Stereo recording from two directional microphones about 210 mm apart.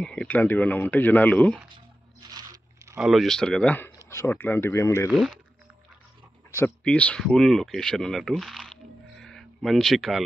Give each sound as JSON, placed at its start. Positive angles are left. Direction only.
{"t": 0.0, "sound": "speech", "side_deg": 5}
{"t": 2.3, "sound": "crunch", "side_deg": -15}
{"t": 3.0, "sound": "speech", "side_deg": 0}
{"t": 6.6, "sound": "speech", "side_deg": 5}